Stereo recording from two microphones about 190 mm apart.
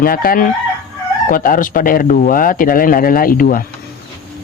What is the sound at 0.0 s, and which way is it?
Speech, 50° left (ahead or behind).